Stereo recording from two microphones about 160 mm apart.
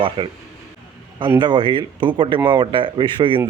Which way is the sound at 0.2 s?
30° right (ahead or behind).